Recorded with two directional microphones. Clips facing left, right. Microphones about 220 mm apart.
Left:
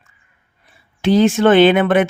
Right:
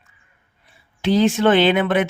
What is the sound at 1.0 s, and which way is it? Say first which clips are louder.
Speech: left 4 dB; 50° left (ahead or behind).